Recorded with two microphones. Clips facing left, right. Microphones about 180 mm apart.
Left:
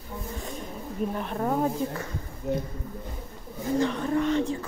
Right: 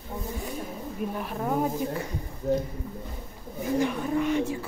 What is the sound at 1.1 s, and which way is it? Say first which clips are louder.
Speech: even; 5° right (ahead or behind).